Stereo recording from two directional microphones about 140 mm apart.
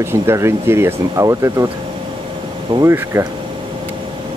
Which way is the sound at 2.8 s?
20° right (ahead or behind).